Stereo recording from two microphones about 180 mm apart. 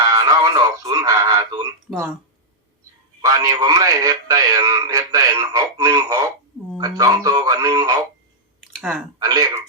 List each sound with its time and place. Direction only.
0.0 s speech: 20° right (ahead or behind)
3.2 s a man's voice: 20° right (ahead or behind)
8.8 s speech: centre (ahead or behind)
9.1 s a man's voice: 20° right (ahead or behind)